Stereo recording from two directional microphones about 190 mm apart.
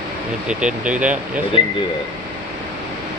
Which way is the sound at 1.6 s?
25° left (ahead or behind).